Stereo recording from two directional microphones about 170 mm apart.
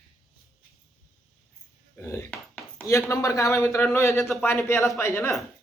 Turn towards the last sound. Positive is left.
turn(degrees=15)  # may be behind; listen again after turning